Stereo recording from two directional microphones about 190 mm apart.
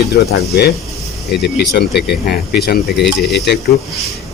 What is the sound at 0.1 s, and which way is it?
Speech, 55° left (ahead or behind).